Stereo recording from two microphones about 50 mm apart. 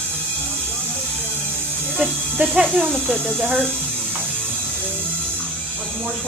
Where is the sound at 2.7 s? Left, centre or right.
Right.